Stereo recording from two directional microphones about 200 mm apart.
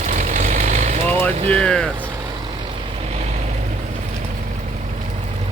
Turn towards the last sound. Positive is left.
turn(degrees=-35)  # may be behind; listen again after turning